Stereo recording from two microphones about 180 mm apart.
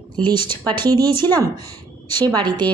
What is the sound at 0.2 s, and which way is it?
Speech, 25° right (ahead or behind).